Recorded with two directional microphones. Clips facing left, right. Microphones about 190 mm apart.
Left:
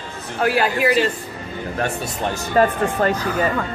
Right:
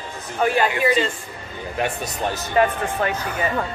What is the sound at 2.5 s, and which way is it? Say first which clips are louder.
Speech: left 3 dB; 40° left (ahead or behind).